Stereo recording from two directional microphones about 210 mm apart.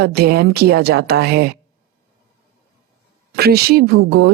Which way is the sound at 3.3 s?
50° right (ahead or behind).